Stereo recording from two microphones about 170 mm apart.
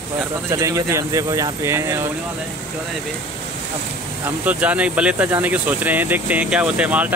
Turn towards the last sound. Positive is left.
turn(degrees=-10)  # may be behind; listen again after turning